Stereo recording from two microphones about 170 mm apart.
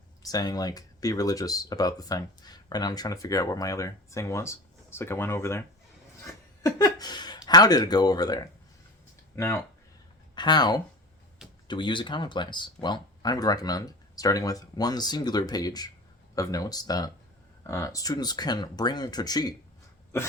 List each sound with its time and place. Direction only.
0.2 s speech: 20° left (ahead or behind)